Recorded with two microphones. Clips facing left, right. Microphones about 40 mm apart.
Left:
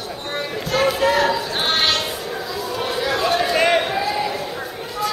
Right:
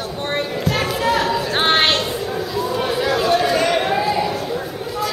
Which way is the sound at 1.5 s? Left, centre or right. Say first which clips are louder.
Right 4 dB; right.